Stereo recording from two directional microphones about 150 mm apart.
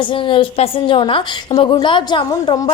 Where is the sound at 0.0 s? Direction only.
35° left (ahead or behind).